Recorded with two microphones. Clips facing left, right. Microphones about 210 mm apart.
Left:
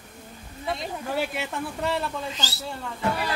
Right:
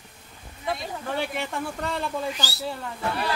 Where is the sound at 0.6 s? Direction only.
5° left (ahead or behind).